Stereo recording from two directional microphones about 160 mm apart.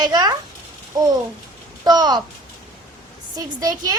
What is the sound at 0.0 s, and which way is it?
Speech, 25° right (ahead or behind).